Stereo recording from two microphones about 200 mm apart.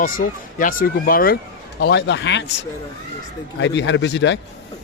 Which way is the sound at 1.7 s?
60° left (ahead or behind).